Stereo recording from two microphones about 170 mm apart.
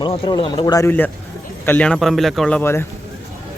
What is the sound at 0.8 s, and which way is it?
A man's voice, 10° left (ahead or behind).